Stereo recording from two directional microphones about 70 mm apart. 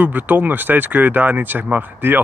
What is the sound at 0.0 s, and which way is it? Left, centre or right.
Speech, right.